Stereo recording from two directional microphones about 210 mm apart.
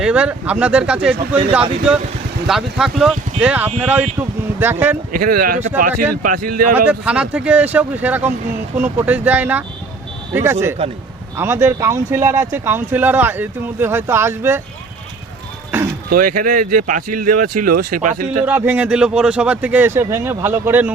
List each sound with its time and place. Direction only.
0.0 s speech: 5° right (ahead or behind)
2.5 s speech: centre (ahead or behind)
5.1 s speech: 45° right (ahead or behind)
6.7 s speech: 5° right (ahead or behind)
16.0 s speech: 45° right (ahead or behind)
18.4 s speech: 10° right (ahead or behind)